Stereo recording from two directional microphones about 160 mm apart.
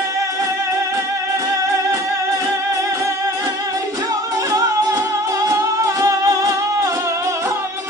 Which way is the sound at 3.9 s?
20° right (ahead or behind).